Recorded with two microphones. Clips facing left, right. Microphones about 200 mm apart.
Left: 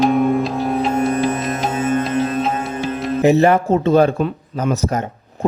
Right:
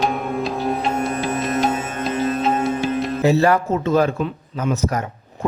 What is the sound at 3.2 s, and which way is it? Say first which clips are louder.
Speech: left 4 dB; 20° left (ahead or behind).